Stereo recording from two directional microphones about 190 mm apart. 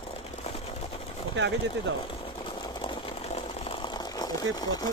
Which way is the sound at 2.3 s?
25° left (ahead or behind).